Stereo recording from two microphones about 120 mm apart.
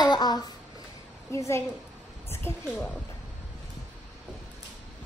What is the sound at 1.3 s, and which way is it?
Speech, 25° left (ahead or behind).